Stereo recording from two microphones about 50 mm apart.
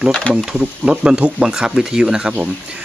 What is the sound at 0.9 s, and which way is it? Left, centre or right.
Speech, centre.